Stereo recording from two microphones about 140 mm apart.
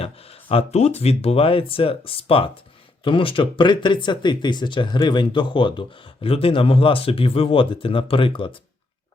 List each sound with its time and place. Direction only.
0.0 s speech: 45° left (ahead or behind)